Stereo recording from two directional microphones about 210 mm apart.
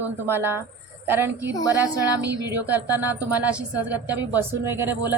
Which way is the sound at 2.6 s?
10° right (ahead or behind).